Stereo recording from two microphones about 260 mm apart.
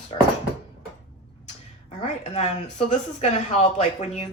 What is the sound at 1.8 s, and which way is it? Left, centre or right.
A woman's voice, left.